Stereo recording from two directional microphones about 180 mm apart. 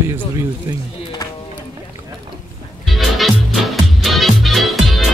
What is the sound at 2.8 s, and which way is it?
Music, centre (ahead or behind).